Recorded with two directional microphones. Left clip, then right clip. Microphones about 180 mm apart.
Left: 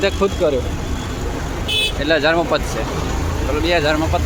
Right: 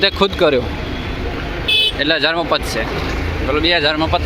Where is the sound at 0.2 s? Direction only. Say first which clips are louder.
Right 3 dB; 25° right (ahead or behind).